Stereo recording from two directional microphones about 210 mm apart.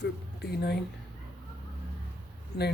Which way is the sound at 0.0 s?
50° left (ahead or behind).